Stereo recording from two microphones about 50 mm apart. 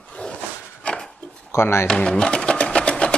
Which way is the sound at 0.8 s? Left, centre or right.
Centre.